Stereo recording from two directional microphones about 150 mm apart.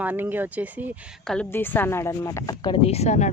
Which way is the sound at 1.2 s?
5° left (ahead or behind).